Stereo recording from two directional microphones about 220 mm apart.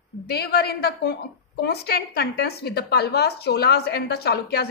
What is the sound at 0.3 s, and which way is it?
A woman's voice, 45° left (ahead or behind).